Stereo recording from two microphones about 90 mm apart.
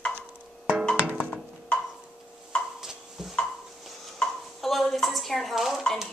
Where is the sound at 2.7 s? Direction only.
5° right (ahead or behind).